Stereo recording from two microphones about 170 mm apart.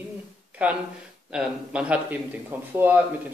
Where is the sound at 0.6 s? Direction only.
10° right (ahead or behind).